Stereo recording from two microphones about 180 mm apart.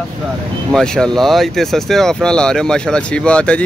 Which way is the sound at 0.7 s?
5° left (ahead or behind).